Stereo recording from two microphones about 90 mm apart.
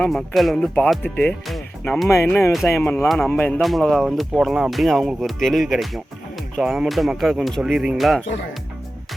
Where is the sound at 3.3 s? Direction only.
15° left (ahead or behind).